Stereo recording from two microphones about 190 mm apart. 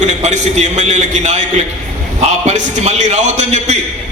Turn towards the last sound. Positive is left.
turn(degrees=-35)  # may be behind; listen again after turning